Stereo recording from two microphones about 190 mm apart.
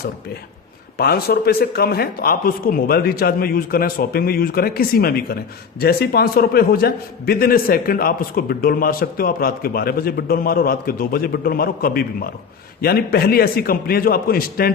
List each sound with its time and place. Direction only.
0.9 s a man's voice: 55° left (ahead or behind)